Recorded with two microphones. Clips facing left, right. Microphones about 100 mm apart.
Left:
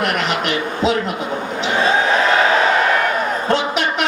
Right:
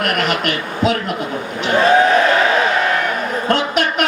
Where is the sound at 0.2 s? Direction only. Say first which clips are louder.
Right 1 dB; 50° right (ahead or behind).